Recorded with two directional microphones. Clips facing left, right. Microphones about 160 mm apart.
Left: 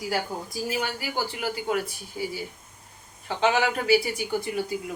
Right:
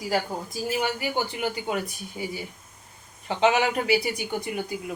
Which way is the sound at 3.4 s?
20° right (ahead or behind).